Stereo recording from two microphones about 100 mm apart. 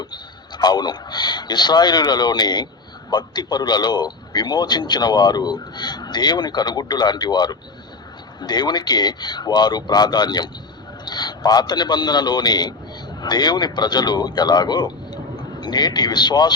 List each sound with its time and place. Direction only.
0.0 s a man's voice: 45° left (ahead or behind)